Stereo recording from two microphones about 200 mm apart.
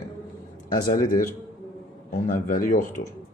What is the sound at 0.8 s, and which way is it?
Speech, 20° left (ahead or behind).